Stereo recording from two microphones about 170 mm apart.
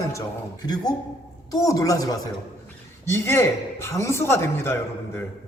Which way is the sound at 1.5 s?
20° left (ahead or behind).